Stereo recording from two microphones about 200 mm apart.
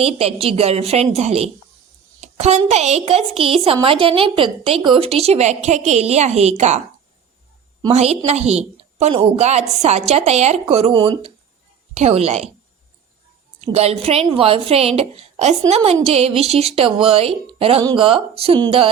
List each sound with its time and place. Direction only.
0.0 s a woman's voice: 30° right (ahead or behind)
7.8 s a woman's voice: 30° right (ahead or behind)
13.6 s a woman's voice: 30° right (ahead or behind)